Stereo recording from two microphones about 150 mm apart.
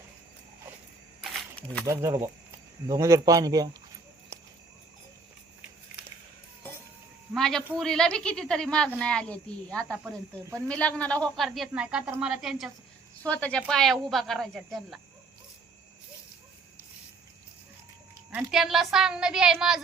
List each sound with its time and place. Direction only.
1.9 s a man's voice: 20° right (ahead or behind)
7.3 s a woman's voice: centre (ahead or behind)
13.2 s a woman's voice: 10° left (ahead or behind)
18.3 s a woman's voice: 5° right (ahead or behind)